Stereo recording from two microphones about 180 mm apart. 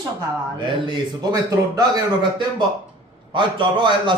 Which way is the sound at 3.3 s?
25° right (ahead or behind).